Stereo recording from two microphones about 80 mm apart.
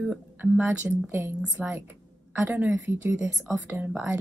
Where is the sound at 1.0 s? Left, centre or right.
Right; by 3.6 s centre.